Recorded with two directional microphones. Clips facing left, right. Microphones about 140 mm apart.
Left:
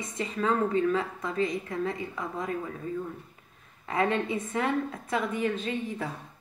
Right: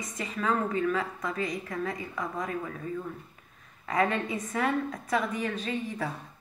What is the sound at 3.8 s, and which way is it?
A woman's voice, 25° left (ahead or behind).